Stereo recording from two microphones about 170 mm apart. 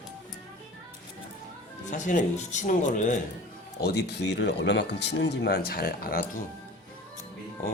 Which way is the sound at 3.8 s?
75° left (ahead or behind).